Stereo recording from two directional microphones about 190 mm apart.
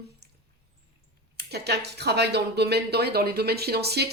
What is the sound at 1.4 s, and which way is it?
Speech, 60° right (ahead or behind).